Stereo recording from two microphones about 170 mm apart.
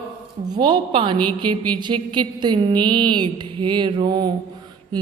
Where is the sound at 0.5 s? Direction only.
25° right (ahead or behind).